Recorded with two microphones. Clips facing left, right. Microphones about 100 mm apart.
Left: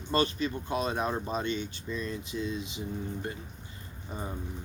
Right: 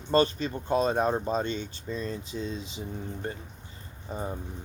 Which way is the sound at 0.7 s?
35° right (ahead or behind).